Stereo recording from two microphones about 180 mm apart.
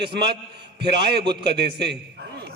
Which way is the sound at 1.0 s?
65° right (ahead or behind).